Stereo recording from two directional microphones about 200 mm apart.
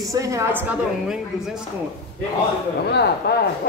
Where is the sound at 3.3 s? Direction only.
55° left (ahead or behind).